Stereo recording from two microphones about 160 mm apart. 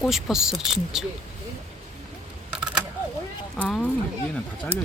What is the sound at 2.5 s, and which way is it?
Camera, 5° right (ahead or behind).